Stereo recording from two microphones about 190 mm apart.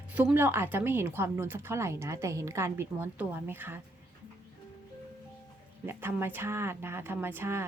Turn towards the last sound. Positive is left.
turn(degrees=-15)  # may be behind; listen again after turning